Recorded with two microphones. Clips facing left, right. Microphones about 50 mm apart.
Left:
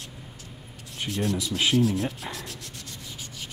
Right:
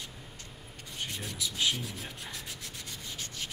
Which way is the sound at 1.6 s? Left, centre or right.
Left.